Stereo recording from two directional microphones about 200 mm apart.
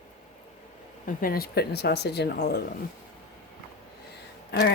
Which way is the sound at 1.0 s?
45° left (ahead or behind).